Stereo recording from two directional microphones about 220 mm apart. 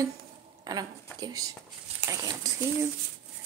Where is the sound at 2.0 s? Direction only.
15° right (ahead or behind).